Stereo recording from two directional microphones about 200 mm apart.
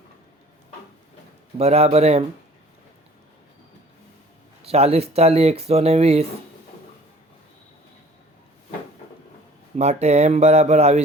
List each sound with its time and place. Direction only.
1.5 s speech: 30° right (ahead or behind)
4.6 s speech: 30° right (ahead or behind)
9.7 s speech: 35° right (ahead or behind)